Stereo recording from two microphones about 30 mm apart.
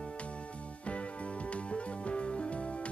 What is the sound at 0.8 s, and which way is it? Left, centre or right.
Music, left.